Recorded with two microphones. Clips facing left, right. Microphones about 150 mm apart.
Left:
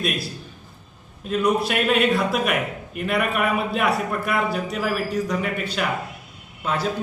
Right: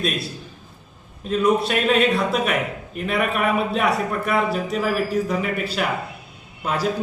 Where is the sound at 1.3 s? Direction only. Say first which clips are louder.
Right 2 dB; centre (ahead or behind).